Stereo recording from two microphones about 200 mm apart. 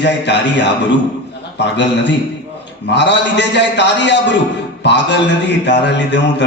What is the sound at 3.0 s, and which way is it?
A man's voice, 60° left (ahead or behind).